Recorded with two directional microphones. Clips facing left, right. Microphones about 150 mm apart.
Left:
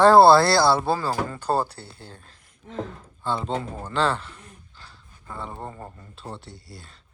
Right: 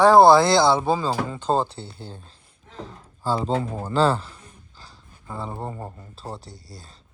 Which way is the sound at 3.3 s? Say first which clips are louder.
Right 3 dB; 40° right (ahead or behind).